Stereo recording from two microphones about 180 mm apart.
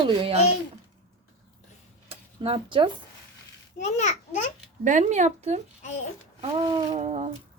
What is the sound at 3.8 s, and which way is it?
Speech, 40° left (ahead or behind).